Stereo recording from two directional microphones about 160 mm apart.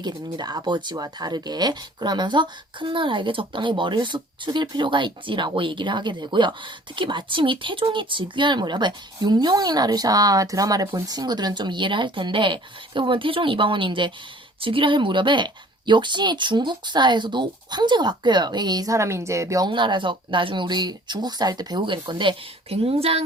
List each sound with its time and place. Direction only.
0.0 s a woman's voice: 25° right (ahead or behind)